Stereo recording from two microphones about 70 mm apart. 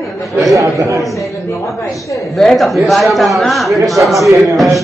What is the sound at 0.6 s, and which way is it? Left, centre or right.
Speech, right.